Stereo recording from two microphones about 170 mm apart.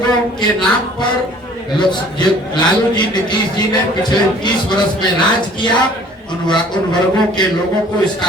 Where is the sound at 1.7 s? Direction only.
25° left (ahead or behind).